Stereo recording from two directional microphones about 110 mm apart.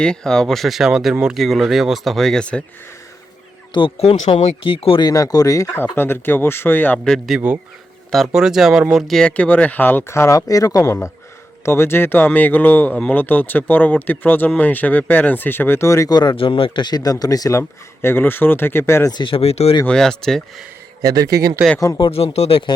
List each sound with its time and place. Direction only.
0.0 s speech: 5° left (ahead or behind)
3.7 s speech: 50° left (ahead or behind)
4.7 s speech: 55° left (ahead or behind)
5.0 s speech: 35° left (ahead or behind); by 7.0 s 15° left (ahead or behind)
7.0 s speech: 5° left (ahead or behind)
7.3 s speech: 10° right (ahead or behind); by 16.1 s 30° left (ahead or behind)
16.1 s speech: 45° left (ahead or behind); by 19.1 s 20° left (ahead or behind)
19.1 s speech: 50° left (ahead or behind)
19.4 s speech: 65° left (ahead or behind)
19.8 s speech: 5° left (ahead or behind)
21.8 s speech: 30° left (ahead or behind)
22.0 s speech: 65° left (ahead or behind)